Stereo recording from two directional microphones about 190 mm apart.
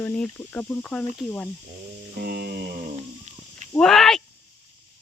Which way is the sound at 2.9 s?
35° right (ahead or behind).